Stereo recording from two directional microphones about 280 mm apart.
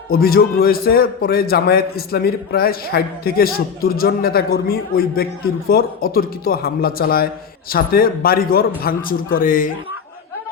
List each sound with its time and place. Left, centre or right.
0.1 s a man's voice: left